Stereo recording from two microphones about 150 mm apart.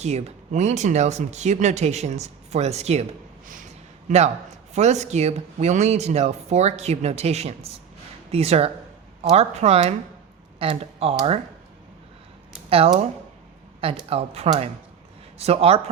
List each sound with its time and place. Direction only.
0.0 s speech: 45° right (ahead or behind)
3.4 s a sound: 60° right (ahead or behind)
4.1 s a man's voice: 55° right (ahead or behind)
12.7 s speech: 40° right (ahead or behind)
14.1 s speech: 45° right (ahead or behind)